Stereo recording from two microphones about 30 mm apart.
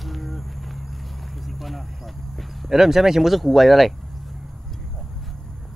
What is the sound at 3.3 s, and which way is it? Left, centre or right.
Speech, centre.